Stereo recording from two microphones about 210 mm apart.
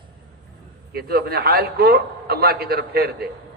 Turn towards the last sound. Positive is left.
turn(degrees=-50)  # may be behind; listen again after turning